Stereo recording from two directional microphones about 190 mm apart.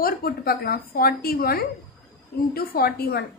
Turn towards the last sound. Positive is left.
turn(degrees=55)  # may be behind; listen again after turning